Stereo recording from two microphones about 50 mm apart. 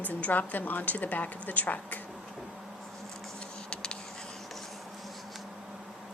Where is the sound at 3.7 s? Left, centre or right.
Centre.